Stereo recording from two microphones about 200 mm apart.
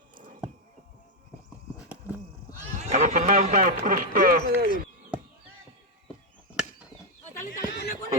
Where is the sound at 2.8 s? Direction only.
35° right (ahead or behind).